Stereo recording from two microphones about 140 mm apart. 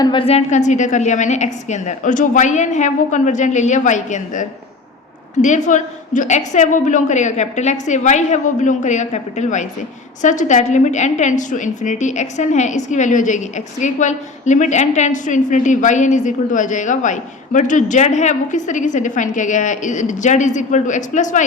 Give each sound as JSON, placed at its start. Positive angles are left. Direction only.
{"t": 0.0, "sound": "a woman's voice", "side_deg": 35}